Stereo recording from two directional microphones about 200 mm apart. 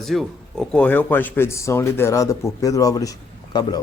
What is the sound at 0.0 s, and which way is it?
A man's voice, centre (ahead or behind).